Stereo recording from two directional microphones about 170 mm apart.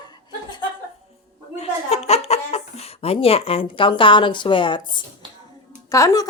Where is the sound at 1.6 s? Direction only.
35° left (ahead or behind); by 6.3 s 20° left (ahead or behind).